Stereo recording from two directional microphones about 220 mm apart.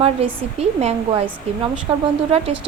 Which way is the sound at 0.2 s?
25° right (ahead or behind).